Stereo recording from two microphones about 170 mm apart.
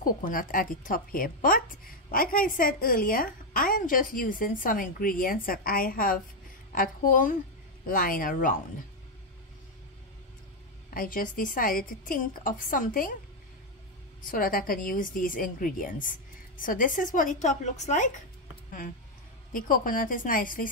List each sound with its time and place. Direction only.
0.0 s a woman's voice: 55° left (ahead or behind)
10.9 s a woman's voice: 55° left (ahead or behind)
14.2 s a woman's voice: 55° left (ahead or behind)
19.5 s a woman's voice: 55° left (ahead or behind)